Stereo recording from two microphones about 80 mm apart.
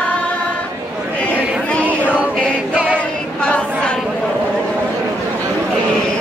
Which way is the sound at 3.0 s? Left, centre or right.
Centre.